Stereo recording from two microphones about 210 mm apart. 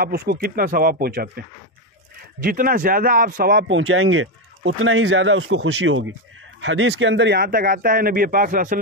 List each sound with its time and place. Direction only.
0.0 s speech: 50° right (ahead or behind)
3.6 s speech: 70° right (ahead or behind); by 8.7 s 40° right (ahead or behind)